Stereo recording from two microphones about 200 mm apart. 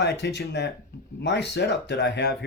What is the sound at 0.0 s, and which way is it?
Speech, 55° left (ahead or behind).